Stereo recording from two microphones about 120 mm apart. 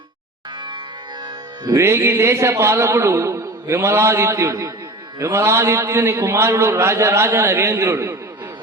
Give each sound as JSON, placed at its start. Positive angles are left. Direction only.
{"t": 1.6, "sound": "a man's voice", "side_deg": -25}